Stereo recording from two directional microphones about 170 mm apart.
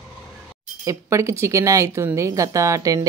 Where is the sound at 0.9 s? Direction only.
15° right (ahead or behind).